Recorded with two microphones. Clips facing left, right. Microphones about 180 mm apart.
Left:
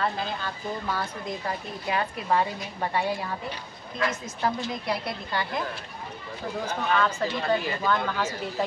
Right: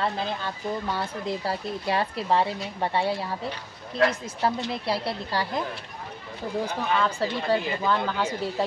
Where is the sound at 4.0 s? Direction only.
65° right (ahead or behind).